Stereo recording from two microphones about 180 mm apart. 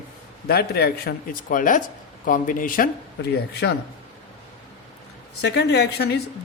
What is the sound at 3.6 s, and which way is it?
Speech, 65° left (ahead or behind).